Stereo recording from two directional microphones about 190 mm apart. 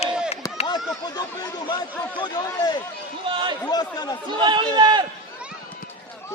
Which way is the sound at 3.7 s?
20° left (ahead or behind).